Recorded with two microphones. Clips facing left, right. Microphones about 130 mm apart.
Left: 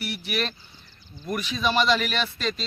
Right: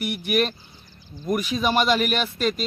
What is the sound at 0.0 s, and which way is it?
Speech, 50° right (ahead or behind).